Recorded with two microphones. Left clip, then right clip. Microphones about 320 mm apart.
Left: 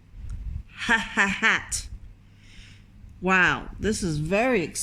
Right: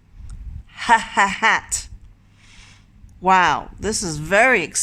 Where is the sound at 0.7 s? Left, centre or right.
Centre.